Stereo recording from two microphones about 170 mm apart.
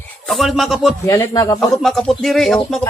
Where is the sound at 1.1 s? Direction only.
20° left (ahead or behind).